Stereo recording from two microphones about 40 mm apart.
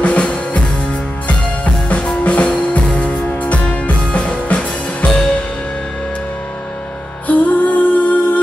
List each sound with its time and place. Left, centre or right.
0.0 s music: left
7.2 s music: left